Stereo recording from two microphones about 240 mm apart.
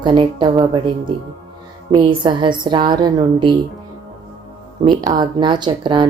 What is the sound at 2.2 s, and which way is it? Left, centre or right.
Speech, centre.